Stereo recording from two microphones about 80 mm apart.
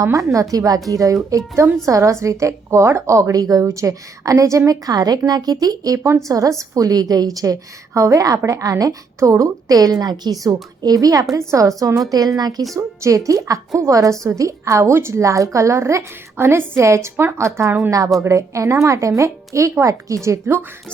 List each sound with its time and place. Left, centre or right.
0.0 s a woman's voice: right
6.0 s a woman's voice: right
12.7 s a woman's voice: right